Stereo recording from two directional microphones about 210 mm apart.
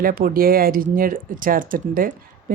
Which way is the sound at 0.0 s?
45° right (ahead or behind).